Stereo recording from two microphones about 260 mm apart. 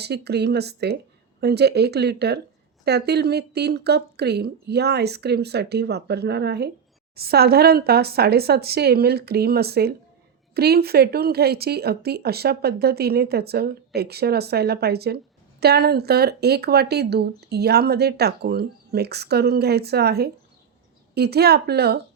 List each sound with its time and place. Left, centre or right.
0.0 s speech: right